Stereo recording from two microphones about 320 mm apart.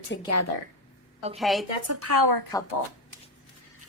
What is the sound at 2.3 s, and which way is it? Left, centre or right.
Speech, right.